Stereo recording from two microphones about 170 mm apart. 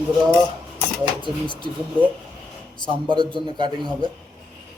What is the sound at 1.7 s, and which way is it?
Speech, 30° right (ahead or behind).